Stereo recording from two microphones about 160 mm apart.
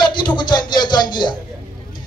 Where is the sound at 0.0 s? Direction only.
30° left (ahead or behind).